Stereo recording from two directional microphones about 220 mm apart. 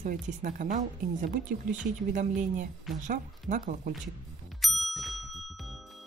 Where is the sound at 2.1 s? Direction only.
35° right (ahead or behind).